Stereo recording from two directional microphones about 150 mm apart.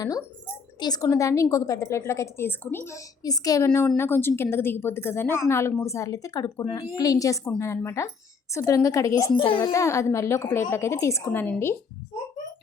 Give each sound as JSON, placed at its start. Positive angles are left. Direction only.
{"t": 0.8, "sound": "a woman's voice", "side_deg": 25}